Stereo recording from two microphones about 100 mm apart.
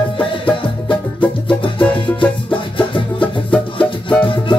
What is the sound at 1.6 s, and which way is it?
Music, 60° left (ahead or behind).